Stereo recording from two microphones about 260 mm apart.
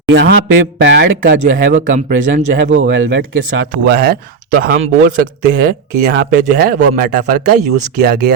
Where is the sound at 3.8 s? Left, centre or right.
Right.